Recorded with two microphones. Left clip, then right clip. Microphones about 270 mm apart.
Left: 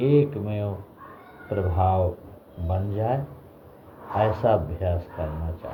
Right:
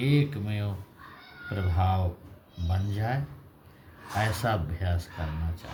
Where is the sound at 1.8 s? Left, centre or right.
Right.